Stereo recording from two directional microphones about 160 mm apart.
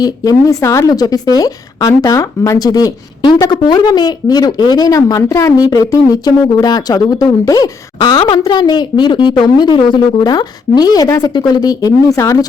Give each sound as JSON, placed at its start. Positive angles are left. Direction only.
{"t": 0.0, "sound": "speech", "side_deg": 20}